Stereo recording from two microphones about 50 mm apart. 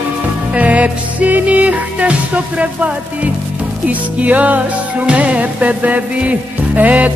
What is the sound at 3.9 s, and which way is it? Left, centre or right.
Music, right.